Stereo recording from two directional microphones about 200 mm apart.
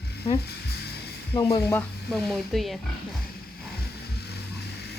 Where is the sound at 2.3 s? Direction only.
Centre (ahead or behind).